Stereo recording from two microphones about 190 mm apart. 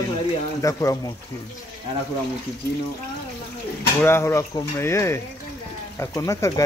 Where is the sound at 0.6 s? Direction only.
15° left (ahead or behind).